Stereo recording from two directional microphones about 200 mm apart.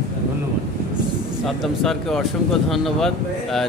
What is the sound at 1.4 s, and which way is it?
Speech, centre (ahead or behind).